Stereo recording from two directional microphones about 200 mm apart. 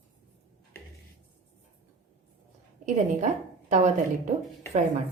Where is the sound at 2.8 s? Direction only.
35° right (ahead or behind).